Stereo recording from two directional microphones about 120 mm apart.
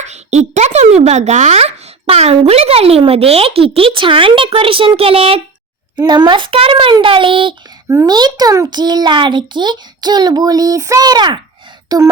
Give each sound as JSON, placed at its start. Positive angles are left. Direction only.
{"t": 0.0, "sound": "speech", "side_deg": -70}
{"t": 6.0, "sound": "a child's voice", "side_deg": -35}
{"t": 7.9, "sound": "a child's voice", "side_deg": -30}